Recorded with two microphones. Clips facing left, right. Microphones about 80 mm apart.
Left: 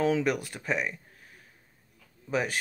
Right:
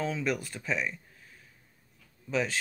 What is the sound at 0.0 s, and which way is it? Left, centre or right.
Speech, left.